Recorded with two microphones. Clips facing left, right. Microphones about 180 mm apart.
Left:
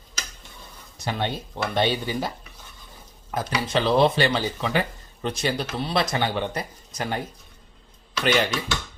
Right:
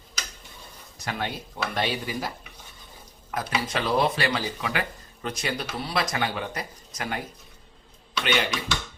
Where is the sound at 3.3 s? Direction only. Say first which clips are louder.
Left 3 dB; 30° left (ahead or behind).